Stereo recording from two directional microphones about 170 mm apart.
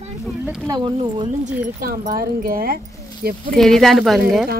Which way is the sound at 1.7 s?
55° right (ahead or behind).